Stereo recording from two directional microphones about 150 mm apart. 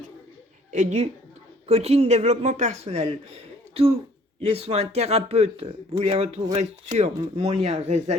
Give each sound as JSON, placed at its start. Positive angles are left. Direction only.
{"t": 0.7, "sound": "a woman's voice", "side_deg": -50}